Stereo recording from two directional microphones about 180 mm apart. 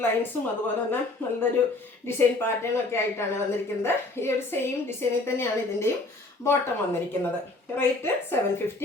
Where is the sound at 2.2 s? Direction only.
15° left (ahead or behind).